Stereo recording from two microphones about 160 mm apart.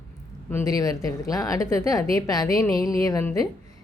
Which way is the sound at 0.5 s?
20° left (ahead or behind).